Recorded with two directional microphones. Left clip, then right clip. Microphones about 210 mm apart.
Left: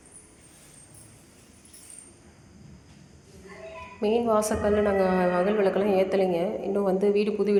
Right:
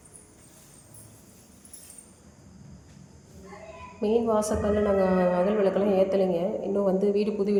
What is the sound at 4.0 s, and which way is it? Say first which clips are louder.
A woman's voice: left 1 dB; centre (ahead or behind).